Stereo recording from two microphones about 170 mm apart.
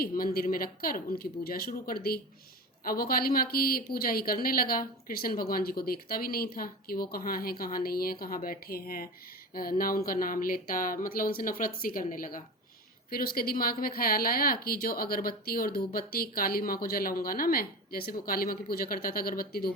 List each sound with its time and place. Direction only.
0.0 s a woman's voice: 60° left (ahead or behind)